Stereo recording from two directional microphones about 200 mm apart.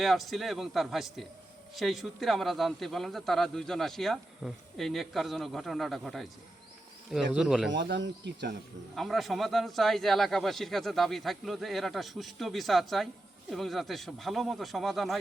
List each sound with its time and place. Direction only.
0.0 s a man's voice: centre (ahead or behind)
7.7 s speech: 65° right (ahead or behind)
9.0 s a man's voice: centre (ahead or behind)